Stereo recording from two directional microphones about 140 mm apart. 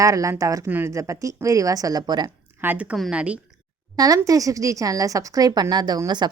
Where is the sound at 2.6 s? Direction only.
10° right (ahead or behind).